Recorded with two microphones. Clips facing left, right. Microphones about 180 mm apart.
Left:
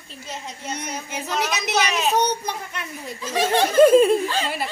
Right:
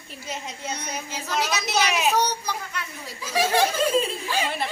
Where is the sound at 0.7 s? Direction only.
20° left (ahead or behind).